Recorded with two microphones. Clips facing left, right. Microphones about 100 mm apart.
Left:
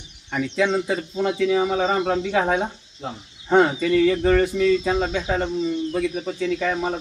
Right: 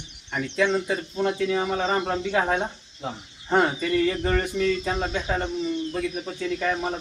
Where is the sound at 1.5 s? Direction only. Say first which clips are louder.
Left 4 dB; 5° left (ahead or behind).